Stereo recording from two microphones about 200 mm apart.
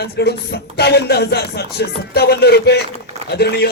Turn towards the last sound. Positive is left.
turn(degrees=55)  # may be behind; listen again after turning